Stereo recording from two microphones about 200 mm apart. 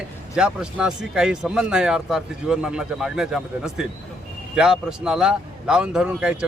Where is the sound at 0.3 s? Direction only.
5° right (ahead or behind).